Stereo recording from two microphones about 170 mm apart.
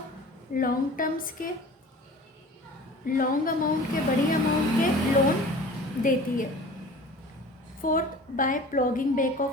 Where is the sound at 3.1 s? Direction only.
55° left (ahead or behind).